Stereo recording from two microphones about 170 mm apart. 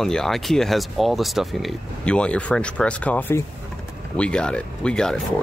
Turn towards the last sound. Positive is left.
turn(degrees=5)  # may be behind; listen again after turning